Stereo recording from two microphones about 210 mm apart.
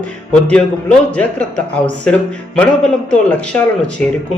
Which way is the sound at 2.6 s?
5° left (ahead or behind).